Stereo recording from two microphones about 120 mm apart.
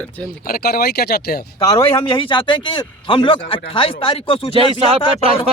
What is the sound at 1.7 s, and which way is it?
Speech, 50° left (ahead or behind).